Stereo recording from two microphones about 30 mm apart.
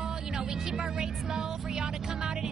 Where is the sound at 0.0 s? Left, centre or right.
Right.